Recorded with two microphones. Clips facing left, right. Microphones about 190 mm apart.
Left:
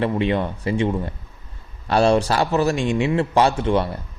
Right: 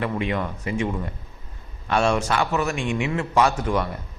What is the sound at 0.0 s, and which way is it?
A man's voice, 30° left (ahead or behind).